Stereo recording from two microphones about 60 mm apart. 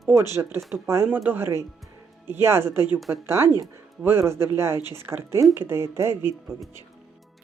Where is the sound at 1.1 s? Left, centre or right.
Right.